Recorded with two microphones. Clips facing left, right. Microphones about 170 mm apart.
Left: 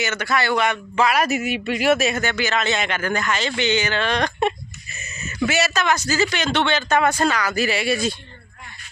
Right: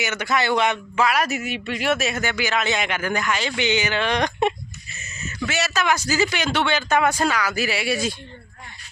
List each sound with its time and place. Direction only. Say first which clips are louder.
0.0 s a man's voice: left 1 dB; 15° right (ahead or behind)
0.9 s a man's voice: left 4 dB; centre (ahead or behind); by 4.5 s 15° right (ahead or behind)
5.5 s speech: left 3 dB; 5° left (ahead or behind)
5.8 s a man's voice: left 1 dB; 10° right (ahead or behind)